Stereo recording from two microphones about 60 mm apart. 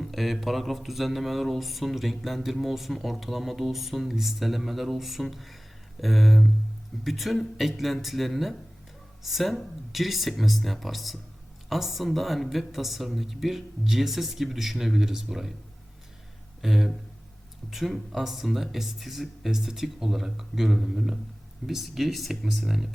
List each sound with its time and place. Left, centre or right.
0.0 s speech: centre
16.6 s speech: centre